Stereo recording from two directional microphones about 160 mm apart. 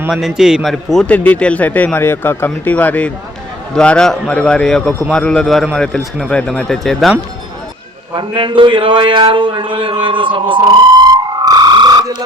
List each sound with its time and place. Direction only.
0.1 s a man's voice: centre (ahead or behind)
8.1 s a man's voice: 30° right (ahead or behind)
10.5 s a sound: 30° right (ahead or behind)